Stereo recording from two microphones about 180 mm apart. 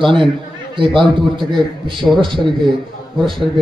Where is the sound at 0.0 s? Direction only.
30° right (ahead or behind).